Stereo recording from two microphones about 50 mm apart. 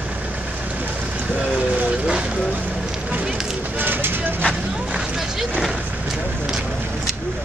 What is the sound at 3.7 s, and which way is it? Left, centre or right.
Vehicle, right.